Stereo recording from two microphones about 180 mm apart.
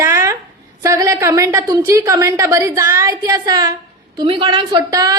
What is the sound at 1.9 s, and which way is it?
A woman's voice, 15° right (ahead or behind).